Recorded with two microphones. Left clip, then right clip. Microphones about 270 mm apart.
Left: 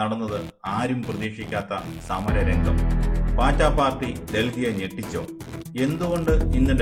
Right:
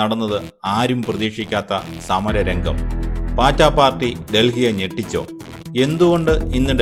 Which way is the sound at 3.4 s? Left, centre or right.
Right.